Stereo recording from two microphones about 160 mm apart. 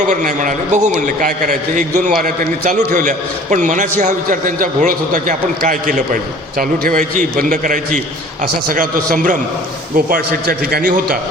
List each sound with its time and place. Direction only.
0.1 s a man's voice: 50° right (ahead or behind)
10.1 s a man's voice: 65° right (ahead or behind)